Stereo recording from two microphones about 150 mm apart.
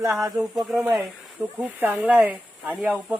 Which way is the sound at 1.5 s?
10° right (ahead or behind).